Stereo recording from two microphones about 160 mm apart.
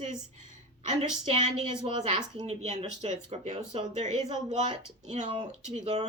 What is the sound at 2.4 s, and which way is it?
Speech, 45° right (ahead or behind).